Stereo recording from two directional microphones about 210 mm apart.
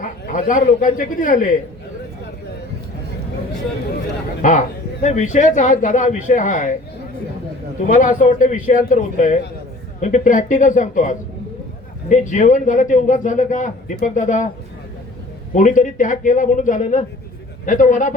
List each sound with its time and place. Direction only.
0.0 s a man's voice: 40° left (ahead or behind)
4.4 s a man's voice: 35° left (ahead or behind)
7.9 s a man's voice: 40° left (ahead or behind)
15.5 s a man's voice: 35° left (ahead or behind)